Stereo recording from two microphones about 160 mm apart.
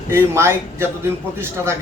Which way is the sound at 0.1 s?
15° right (ahead or behind).